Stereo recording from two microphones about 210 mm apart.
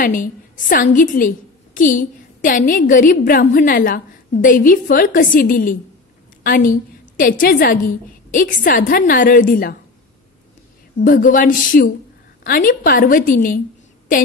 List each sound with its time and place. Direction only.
0.0 s a woman's voice: 40° left (ahead or behind)
11.0 s a woman's voice: 40° left (ahead or behind)